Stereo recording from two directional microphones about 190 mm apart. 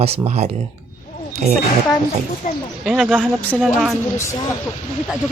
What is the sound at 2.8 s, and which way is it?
A woman's voice, centre (ahead or behind).